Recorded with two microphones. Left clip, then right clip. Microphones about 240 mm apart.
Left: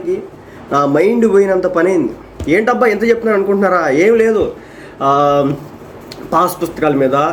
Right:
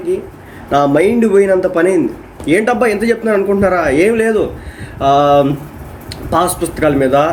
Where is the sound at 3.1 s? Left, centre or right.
Centre.